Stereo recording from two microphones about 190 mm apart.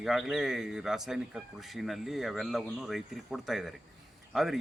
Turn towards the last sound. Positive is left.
turn(degrees=0)  # may be behind; listen again after turning